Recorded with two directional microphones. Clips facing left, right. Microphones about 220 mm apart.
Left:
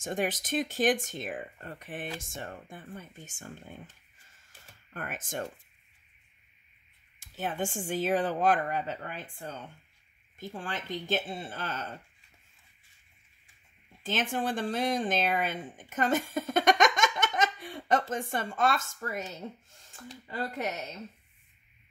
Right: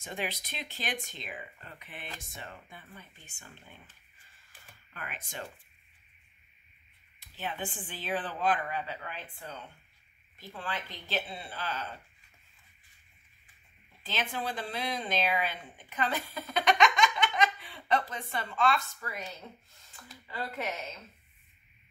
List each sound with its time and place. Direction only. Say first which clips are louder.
0.0 s speech: left 6 dB; 50° left (ahead or behind)
4.5 s a sound: left 2 dB; 50° left (ahead or behind)
7.2 s speech: left 5 dB; 45° left (ahead or behind)
14.0 s speech: left 5 dB; 45° left (ahead or behind)